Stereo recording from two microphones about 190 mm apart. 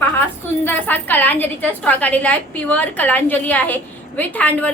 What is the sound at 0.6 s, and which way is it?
A woman's voice, 10° left (ahead or behind).